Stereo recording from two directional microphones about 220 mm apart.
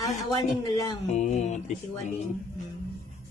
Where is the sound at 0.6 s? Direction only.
20° left (ahead or behind).